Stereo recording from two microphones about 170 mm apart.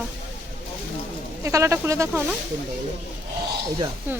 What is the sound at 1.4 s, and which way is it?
Speech, 15° right (ahead or behind).